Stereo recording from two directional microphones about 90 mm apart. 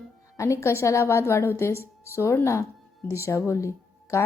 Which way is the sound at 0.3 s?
35° left (ahead or behind).